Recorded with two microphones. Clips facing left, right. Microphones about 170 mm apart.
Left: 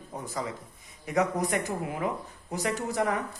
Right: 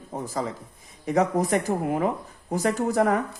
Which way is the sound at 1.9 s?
50° right (ahead or behind).